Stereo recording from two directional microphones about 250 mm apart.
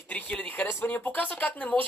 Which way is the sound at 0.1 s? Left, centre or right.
Centre.